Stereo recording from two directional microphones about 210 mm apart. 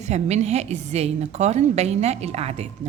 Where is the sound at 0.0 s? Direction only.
30° right (ahead or behind).